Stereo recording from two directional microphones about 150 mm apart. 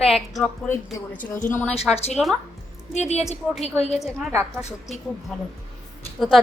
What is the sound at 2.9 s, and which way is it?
A woman's voice, 50° left (ahead or behind).